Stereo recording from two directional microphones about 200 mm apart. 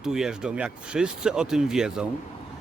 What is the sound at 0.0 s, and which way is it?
Speech, centre (ahead or behind).